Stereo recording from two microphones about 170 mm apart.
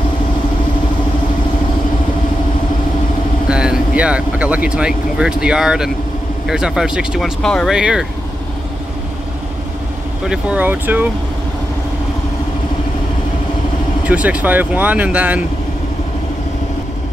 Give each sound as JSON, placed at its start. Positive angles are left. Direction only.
{"t": 3.4, "sound": "speech", "side_deg": -5}
{"t": 10.2, "sound": "speech", "side_deg": -5}
{"t": 14.0, "sound": "speech", "side_deg": -10}